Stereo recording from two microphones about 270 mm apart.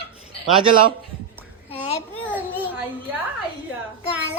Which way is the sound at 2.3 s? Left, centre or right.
Centre.